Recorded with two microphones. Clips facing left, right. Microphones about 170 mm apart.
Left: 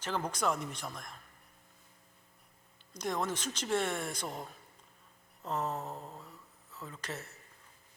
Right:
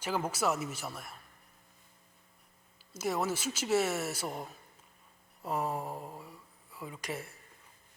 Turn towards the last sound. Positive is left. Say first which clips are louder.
# right 3 dB
turn(degrees=-10)  # may be behind; listen again after turning